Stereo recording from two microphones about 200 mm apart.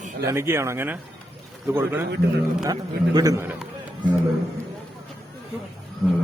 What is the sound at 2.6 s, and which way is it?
A man's voice, 20° right (ahead or behind).